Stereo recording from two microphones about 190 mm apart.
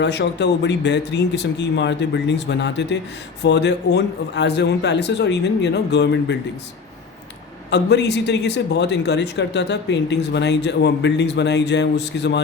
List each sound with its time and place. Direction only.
0.0 s a man's voice: 65° left (ahead or behind)
7.7 s a man's voice: 65° left (ahead or behind)